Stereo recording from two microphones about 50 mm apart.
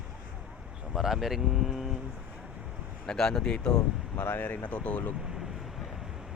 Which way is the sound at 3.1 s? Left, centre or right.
Centre.